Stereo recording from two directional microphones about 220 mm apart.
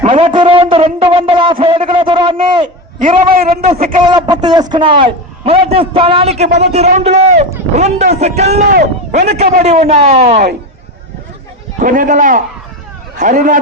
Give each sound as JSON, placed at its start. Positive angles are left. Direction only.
{"t": 0.0, "sound": "a man's voice", "side_deg": -25}
{"t": 3.0, "sound": "a man's voice", "side_deg": -40}
{"t": 4.0, "sound": "a man's voice", "side_deg": -20}
{"t": 11.8, "sound": "a man's voice", "side_deg": -35}